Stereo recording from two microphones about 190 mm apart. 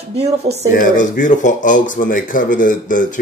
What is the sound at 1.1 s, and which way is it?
Speech, 45° left (ahead or behind).